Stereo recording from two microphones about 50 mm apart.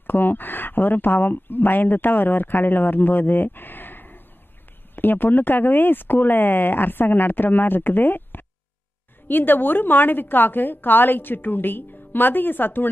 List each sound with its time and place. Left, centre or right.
0.0 s speech: left